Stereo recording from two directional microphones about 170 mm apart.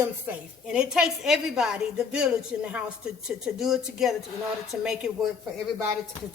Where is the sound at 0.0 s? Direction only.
10° right (ahead or behind).